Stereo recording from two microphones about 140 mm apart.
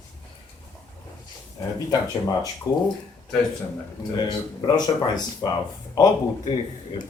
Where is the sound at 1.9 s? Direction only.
25° left (ahead or behind).